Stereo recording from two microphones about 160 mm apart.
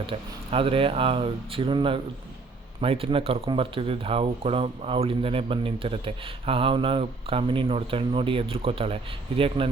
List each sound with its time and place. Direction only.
0.1 s speech: 35° right (ahead or behind)